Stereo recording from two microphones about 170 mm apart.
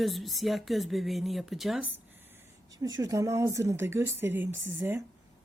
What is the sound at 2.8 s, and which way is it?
Speech, 20° right (ahead or behind).